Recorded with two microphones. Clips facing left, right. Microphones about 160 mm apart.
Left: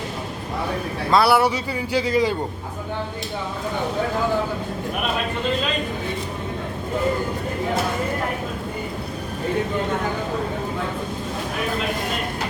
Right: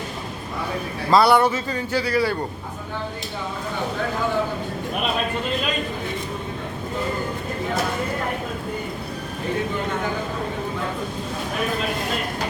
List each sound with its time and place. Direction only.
1.1 s speech: 5° left (ahead or behind)